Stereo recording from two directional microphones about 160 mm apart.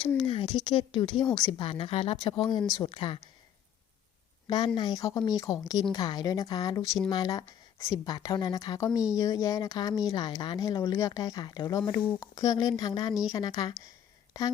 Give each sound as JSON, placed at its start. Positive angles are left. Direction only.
{"t": 0.2, "sound": "a sound", "side_deg": 40}
{"t": 0.5, "sound": "speech", "side_deg": 30}
{"t": 4.4, "sound": "speech", "side_deg": 25}